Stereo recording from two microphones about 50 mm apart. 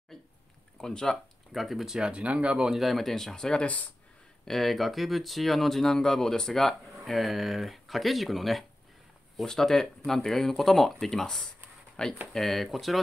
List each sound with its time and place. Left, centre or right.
0.7 s speech: centre
1.5 s speech: centre
2.0 s speech: right
2.7 s speech: centre
3.6 s speech: left
4.5 s speech: centre